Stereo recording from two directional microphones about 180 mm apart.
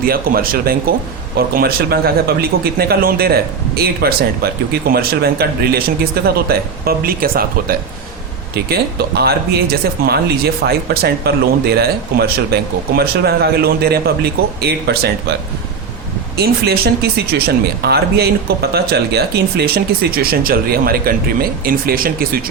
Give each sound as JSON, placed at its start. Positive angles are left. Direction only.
{"t": 0.0, "sound": "speech", "side_deg": -55}
{"t": 16.4, "sound": "speech", "side_deg": -60}